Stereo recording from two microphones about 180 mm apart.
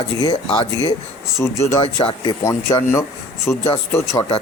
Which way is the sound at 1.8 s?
25° left (ahead or behind).